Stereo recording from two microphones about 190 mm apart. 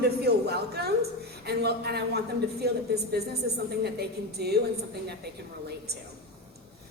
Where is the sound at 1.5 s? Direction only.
60° right (ahead or behind).